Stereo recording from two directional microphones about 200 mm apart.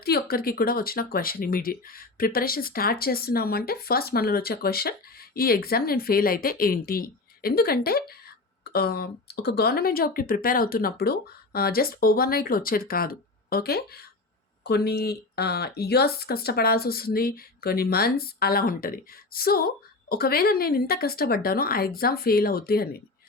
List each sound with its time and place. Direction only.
0.0 s speech: 50° left (ahead or behind)